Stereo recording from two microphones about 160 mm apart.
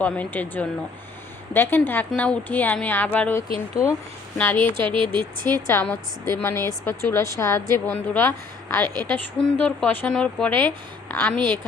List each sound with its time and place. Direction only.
0.0 s a woman's voice: 10° left (ahead or behind)
4.8 s a woman's voice: 30° right (ahead or behind)
5.6 s a woman's voice: 10° left (ahead or behind)